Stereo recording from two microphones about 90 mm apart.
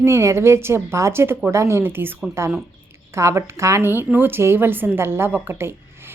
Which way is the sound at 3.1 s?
30° right (ahead or behind).